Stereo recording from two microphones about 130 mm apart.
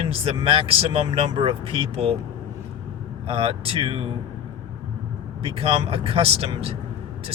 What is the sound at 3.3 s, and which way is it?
Speech, 45° right (ahead or behind).